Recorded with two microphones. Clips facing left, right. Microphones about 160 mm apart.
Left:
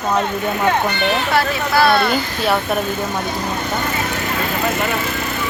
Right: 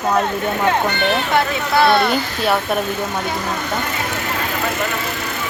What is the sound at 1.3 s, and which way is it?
Speech, 20° right (ahead or behind).